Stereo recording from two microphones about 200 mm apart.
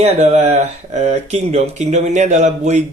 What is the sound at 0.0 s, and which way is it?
Speech, 35° right (ahead or behind).